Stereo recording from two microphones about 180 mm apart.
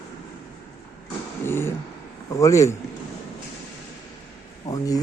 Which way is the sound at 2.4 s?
15° left (ahead or behind).